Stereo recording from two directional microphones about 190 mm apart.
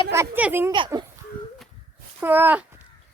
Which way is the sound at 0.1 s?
10° right (ahead or behind).